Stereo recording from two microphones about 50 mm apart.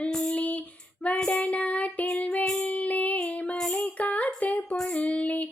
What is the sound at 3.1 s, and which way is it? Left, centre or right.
Female singing, left.